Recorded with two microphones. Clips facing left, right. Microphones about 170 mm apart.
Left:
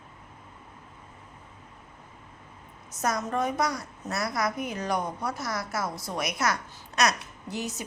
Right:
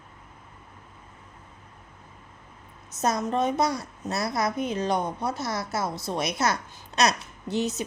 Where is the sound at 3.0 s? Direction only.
25° right (ahead or behind).